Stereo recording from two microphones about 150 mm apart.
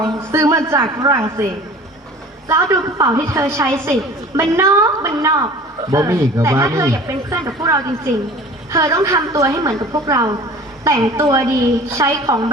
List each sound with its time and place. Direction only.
0.3 s a man's voice: 20° right (ahead or behind)
2.5 s speech: 20° right (ahead or behind)